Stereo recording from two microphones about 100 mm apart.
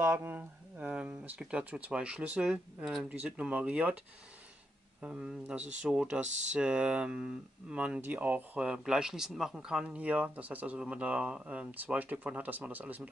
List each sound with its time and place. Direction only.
0.0 s speech: 25° right (ahead or behind)
5.0 s speech: 10° right (ahead or behind)